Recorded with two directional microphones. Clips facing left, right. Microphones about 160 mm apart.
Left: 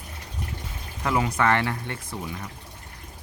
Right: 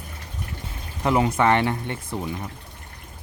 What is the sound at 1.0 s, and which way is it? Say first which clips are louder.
Speech: right 4 dB; 25° right (ahead or behind).